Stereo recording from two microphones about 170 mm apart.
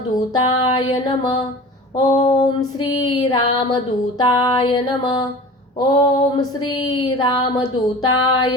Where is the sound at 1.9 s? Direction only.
30° left (ahead or behind).